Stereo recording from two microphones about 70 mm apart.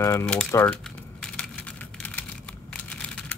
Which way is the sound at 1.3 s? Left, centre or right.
Left.